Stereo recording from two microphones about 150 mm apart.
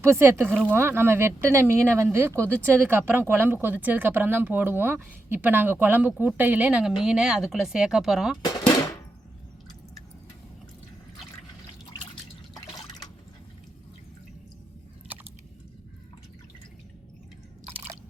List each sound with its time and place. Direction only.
0.0 s speech: 15° right (ahead or behind)
12.5 s drip: 25° left (ahead or behind)